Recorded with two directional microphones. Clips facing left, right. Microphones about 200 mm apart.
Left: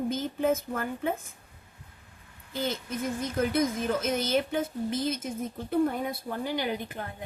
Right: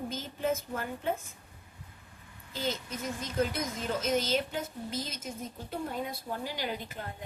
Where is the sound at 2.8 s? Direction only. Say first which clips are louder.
Left 6 dB; 55° left (ahead or behind).